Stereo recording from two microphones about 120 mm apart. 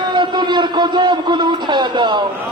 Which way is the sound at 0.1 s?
40° right (ahead or behind).